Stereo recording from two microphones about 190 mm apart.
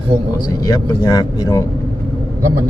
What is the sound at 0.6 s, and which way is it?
Speech, 20° left (ahead or behind).